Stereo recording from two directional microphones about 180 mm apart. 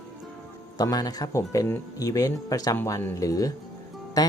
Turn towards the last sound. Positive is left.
turn(degrees=20)  # may be behind; listen again after turning